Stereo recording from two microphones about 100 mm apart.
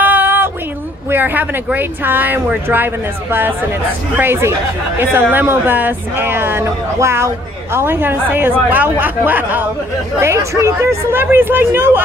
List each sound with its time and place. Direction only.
0.0 s a sound: 20° right (ahead or behind)
1.1 s speech: 20° right (ahead or behind)
10.2 s speech: 30° right (ahead or behind)